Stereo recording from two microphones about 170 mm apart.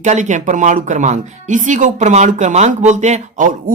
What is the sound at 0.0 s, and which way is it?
Speech, 45° right (ahead or behind).